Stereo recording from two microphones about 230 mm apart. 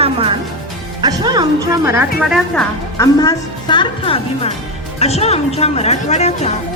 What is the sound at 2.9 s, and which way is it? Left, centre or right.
Speech, centre.